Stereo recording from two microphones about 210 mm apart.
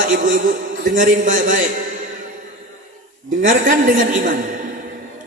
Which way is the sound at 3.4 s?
40° right (ahead or behind).